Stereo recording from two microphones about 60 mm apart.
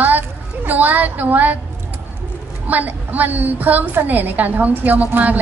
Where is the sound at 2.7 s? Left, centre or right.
Right.